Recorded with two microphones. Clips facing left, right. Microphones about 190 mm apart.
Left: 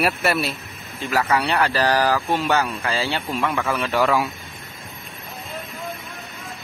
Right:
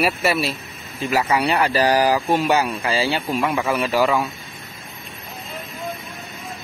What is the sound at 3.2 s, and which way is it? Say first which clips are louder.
Speech: right 2 dB; 15° right (ahead or behind).